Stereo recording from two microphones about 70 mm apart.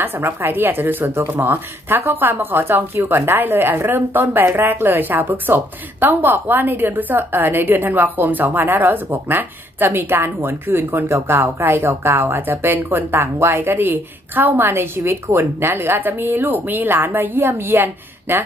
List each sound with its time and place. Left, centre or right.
0.0 s speech: right